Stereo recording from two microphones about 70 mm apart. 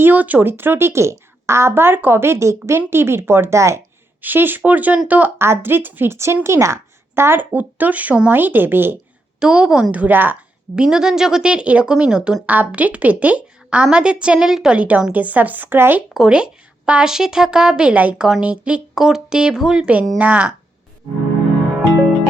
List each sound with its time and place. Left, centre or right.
0.0 s speech: right
4.2 s speech: right
5.4 s speech: right
7.2 s speech: right
9.4 s speech: centre
9.9 s speech: right
10.8 s speech: centre; by 16.0 s right
16.1 s speech: centre
20.1 s speech: right